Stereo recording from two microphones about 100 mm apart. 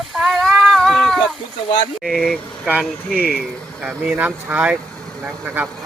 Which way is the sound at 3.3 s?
Centre (ahead or behind).